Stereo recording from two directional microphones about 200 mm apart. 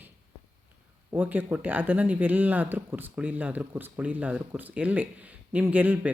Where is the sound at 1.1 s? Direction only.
10° right (ahead or behind).